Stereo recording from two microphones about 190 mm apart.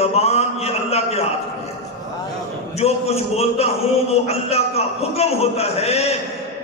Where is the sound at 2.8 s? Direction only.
35° left (ahead or behind).